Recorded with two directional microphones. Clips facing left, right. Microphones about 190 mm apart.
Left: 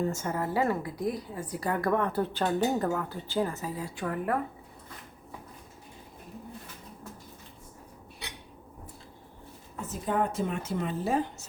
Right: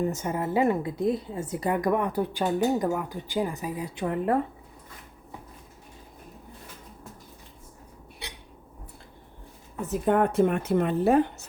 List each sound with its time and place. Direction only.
0.0 s a woman's voice: 20° right (ahead or behind)
9.8 s speech: 60° right (ahead or behind)